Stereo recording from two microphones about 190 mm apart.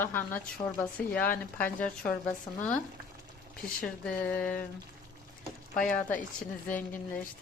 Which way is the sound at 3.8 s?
5° left (ahead or behind).